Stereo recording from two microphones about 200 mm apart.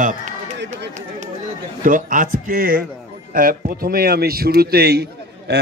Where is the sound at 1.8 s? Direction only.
40° right (ahead or behind).